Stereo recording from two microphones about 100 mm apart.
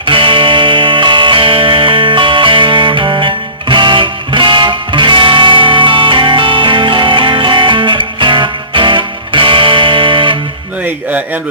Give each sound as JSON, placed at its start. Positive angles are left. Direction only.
{"t": 0.0, "sound": "music", "side_deg": -60}